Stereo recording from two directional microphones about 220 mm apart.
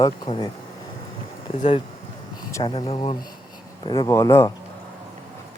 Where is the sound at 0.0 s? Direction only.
20° left (ahead or behind).